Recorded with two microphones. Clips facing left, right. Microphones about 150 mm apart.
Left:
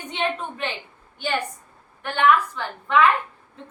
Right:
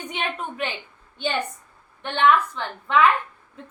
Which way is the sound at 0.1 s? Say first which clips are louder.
Left 4 dB; 15° right (ahead or behind).